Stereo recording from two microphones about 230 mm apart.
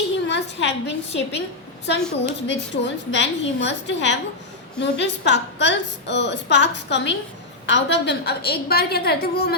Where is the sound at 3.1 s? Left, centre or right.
Left.